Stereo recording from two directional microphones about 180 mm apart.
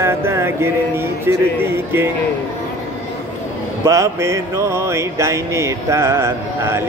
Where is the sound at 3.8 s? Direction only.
15° right (ahead or behind).